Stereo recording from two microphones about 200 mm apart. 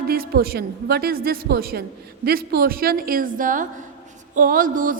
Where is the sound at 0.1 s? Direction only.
50° right (ahead or behind).